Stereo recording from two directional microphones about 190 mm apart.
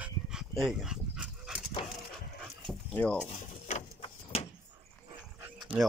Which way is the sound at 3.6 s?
35° left (ahead or behind).